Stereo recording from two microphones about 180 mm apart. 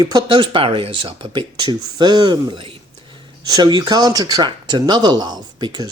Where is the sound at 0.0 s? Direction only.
20° right (ahead or behind).